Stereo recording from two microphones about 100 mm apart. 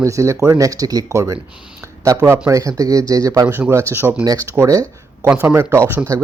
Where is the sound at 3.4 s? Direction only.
20° right (ahead or behind).